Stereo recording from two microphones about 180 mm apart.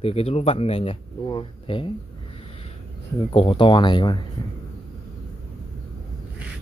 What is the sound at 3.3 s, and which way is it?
Speech, 30° left (ahead or behind).